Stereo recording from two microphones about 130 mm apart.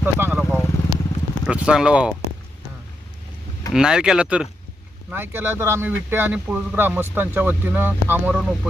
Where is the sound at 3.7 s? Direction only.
5° right (ahead or behind).